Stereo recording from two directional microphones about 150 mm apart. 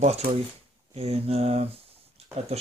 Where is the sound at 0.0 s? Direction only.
45° right (ahead or behind).